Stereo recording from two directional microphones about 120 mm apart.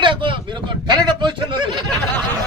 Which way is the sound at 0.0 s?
45° right (ahead or behind).